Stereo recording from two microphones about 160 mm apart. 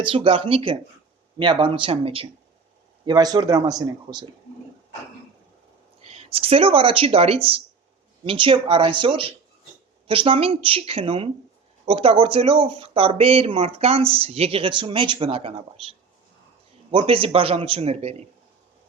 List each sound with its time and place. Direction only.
0.0 s speech: 35° right (ahead or behind)
3.1 s speech: 25° right (ahead or behind)
6.0 s speech: 40° right (ahead or behind)